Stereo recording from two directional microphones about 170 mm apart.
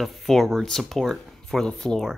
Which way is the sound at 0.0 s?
Centre (ahead or behind).